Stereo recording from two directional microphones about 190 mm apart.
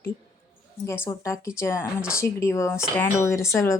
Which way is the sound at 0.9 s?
15° left (ahead or behind).